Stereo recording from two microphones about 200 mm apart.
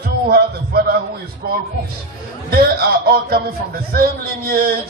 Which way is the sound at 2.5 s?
50° right (ahead or behind).